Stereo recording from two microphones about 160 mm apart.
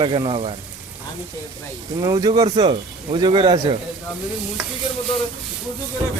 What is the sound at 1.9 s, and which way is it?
Speech, 20° right (ahead or behind).